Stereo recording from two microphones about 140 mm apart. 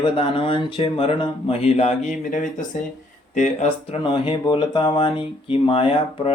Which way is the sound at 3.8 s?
40° left (ahead or behind).